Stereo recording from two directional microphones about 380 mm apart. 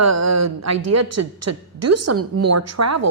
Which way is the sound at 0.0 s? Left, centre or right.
Right.